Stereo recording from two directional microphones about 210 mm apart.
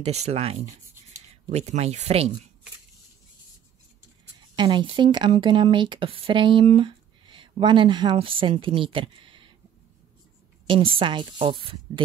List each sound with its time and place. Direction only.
0.0 s speech: 30° right (ahead or behind)
4.6 s speech: 20° right (ahead or behind)
11.0 s speech: 20° right (ahead or behind)